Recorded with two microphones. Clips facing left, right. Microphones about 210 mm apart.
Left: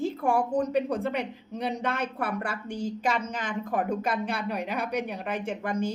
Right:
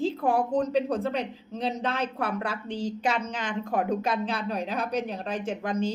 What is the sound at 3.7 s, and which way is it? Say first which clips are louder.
Speech: right 1 dB; 10° left (ahead or behind).